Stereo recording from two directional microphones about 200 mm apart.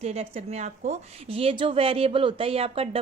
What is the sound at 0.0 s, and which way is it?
A woman's voice, 35° right (ahead or behind).